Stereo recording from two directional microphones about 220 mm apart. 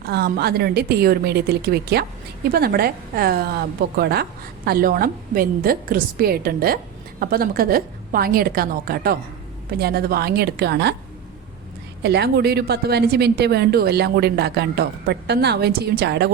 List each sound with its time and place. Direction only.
0.1 s a woman's voice: 45° right (ahead or behind)
12.0 s a woman's voice: 50° right (ahead or behind)